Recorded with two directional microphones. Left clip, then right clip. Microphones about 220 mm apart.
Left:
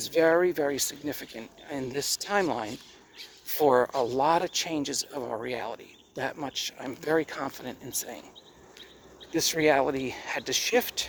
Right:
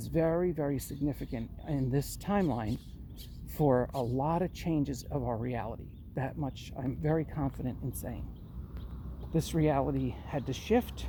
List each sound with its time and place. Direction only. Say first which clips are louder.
0.0 s speech: left 8 dB; 15° left (ahead or behind)
9.3 s speech: left 7 dB; 15° left (ahead or behind)